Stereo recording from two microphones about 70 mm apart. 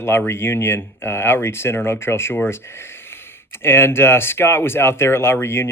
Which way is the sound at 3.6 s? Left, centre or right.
Left.